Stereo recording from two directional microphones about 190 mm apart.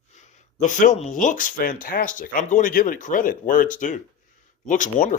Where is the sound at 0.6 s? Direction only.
40° left (ahead or behind).